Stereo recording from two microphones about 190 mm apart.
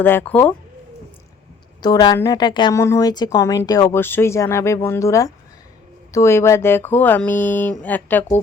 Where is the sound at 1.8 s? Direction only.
20° left (ahead or behind).